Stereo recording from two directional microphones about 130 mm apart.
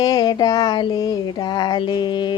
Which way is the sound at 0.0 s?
30° left (ahead or behind).